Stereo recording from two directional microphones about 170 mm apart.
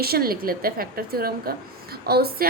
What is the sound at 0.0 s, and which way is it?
A woman's voice, 65° right (ahead or behind).